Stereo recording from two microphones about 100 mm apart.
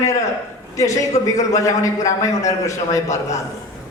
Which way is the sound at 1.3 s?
30° left (ahead or behind).